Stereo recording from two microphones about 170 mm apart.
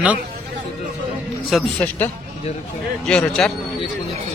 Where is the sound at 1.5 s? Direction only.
10° left (ahead or behind).